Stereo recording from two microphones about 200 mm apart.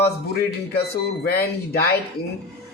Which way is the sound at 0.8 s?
50° left (ahead or behind).